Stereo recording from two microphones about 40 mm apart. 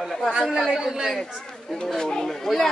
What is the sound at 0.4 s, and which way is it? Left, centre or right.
Speech, centre.